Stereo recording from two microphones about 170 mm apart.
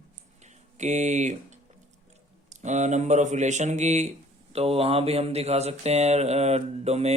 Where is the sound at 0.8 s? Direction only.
45° right (ahead or behind).